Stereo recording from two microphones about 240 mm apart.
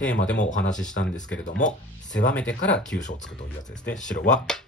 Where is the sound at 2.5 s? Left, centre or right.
Left.